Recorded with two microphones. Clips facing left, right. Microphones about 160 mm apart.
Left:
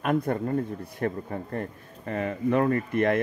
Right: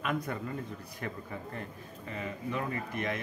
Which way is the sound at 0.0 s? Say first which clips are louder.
Left 9 dB; 50° left (ahead or behind).